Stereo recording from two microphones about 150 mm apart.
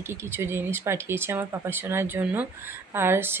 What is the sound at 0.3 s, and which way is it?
Speech, 15° right (ahead or behind).